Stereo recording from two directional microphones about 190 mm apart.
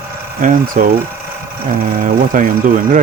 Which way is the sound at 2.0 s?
45° right (ahead or behind).